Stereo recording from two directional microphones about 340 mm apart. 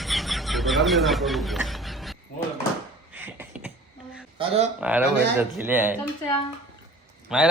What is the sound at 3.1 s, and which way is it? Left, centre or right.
Beatboxing, centre.